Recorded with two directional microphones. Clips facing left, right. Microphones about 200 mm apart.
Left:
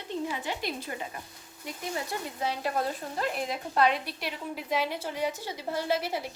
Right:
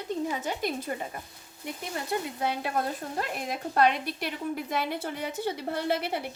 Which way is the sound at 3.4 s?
50° right (ahead or behind).